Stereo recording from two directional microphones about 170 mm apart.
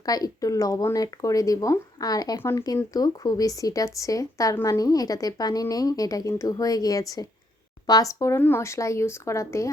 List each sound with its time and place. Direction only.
0.0 s speech: 20° left (ahead or behind)